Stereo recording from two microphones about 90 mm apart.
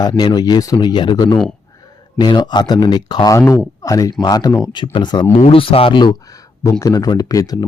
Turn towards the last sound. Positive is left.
turn(degrees=45)  # may be behind; listen again after turning